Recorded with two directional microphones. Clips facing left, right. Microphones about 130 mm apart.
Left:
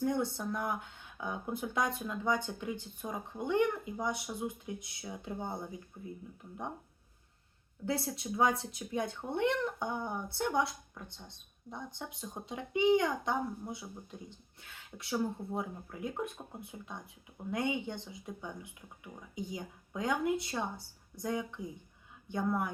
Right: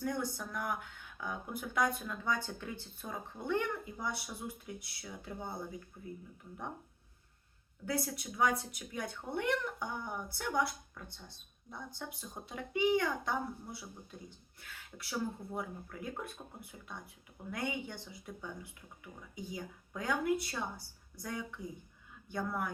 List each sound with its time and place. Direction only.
0.0 s speech: 25° left (ahead or behind)
7.9 s speech: 25° left (ahead or behind)